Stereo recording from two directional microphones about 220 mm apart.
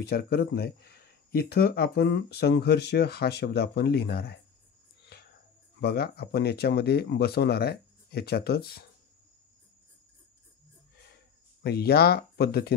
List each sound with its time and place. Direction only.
0.0 s speech: 45° left (ahead or behind)
5.8 s speech: 45° left (ahead or behind)
11.6 s speech: 45° left (ahead or behind)